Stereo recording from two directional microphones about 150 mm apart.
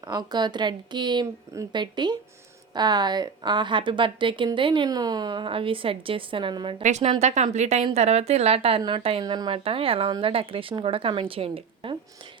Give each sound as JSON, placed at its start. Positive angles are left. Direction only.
{"t": 0.1, "sound": "speech", "side_deg": -30}
{"t": 6.8, "sound": "a woman's voice", "side_deg": -50}